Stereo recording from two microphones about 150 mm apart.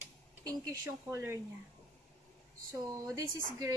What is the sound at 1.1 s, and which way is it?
Speech, 20° right (ahead or behind).